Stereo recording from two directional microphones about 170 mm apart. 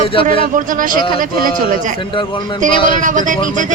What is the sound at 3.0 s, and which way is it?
Speech, 50° right (ahead or behind).